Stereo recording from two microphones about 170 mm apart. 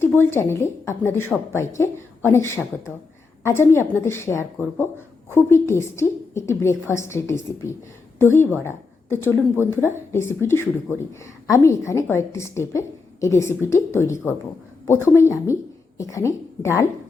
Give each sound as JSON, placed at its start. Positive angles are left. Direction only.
{"t": 0.0, "sound": "speech", "side_deg": 15}